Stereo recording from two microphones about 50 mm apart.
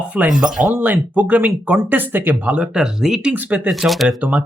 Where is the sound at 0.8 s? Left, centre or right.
Right.